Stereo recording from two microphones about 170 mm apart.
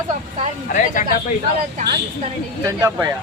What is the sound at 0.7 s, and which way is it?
Speech, 50° left (ahead or behind).